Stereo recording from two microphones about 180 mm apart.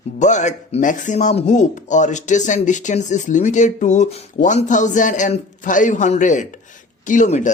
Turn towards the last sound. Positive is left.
turn(degrees=40)  # may be behind; listen again after turning